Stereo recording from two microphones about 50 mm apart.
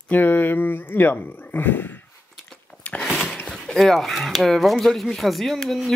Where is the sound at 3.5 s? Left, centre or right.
Centre.